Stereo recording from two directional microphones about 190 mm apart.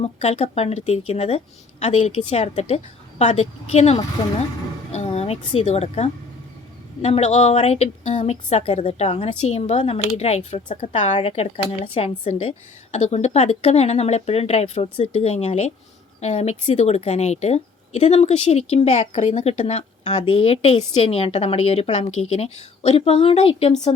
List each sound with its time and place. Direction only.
0.0 s a woman's voice: 35° left (ahead or behind)